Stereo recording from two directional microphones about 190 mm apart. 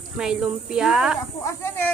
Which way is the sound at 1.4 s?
15° left (ahead or behind).